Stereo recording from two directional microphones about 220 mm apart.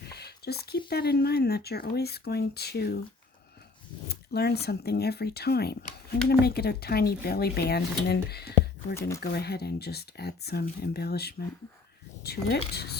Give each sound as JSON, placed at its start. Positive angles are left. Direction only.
{"t": 0.1, "sound": "a sound", "side_deg": 45}
{"t": 0.9, "sound": "speech", "side_deg": 45}
{"t": 4.1, "sound": "speech", "side_deg": 45}
{"t": 9.0, "sound": "speech", "side_deg": 15}
{"t": 9.2, "sound": "speech", "side_deg": 45}